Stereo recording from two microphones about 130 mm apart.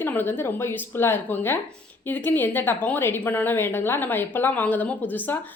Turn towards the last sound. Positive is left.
turn(degrees=15)  # may be behind; listen again after turning